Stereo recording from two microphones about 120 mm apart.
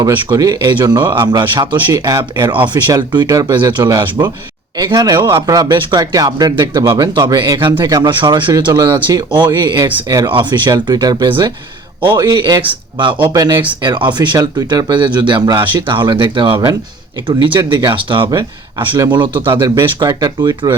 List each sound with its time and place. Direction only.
0.0 s speech: 35° right (ahead or behind)